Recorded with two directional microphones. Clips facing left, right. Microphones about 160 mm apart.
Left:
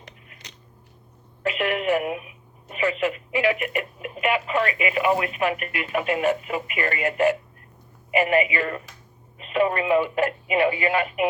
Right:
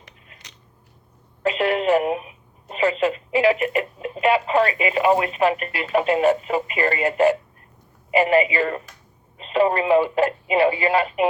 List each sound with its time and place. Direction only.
1.4 s speech: 30° right (ahead or behind)